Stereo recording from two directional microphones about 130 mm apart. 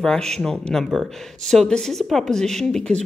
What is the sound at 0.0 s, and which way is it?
Speech, 5° left (ahead or behind).